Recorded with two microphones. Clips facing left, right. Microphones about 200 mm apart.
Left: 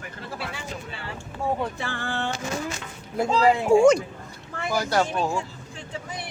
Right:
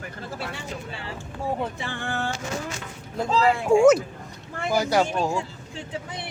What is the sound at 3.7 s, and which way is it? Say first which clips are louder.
Speech: right 1 dB; centre (ahead or behind).